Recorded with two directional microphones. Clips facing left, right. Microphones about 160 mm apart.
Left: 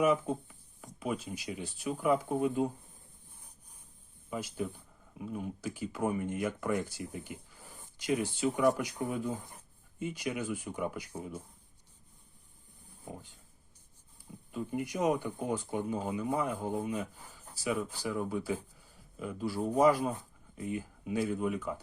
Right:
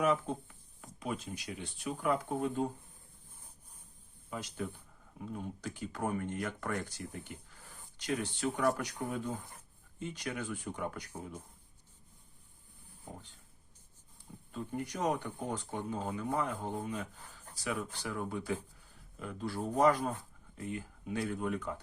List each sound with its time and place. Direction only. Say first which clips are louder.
0.0 s speech: left 3 dB; 10° left (ahead or behind)
4.3 s speech: left 3 dB; 5° left (ahead or behind)
14.5 s speech: left 4 dB; 10° left (ahead or behind)